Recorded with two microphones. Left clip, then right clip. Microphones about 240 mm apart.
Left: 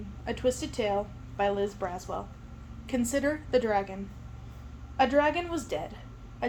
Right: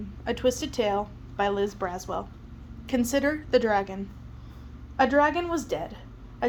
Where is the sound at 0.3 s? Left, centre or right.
Right.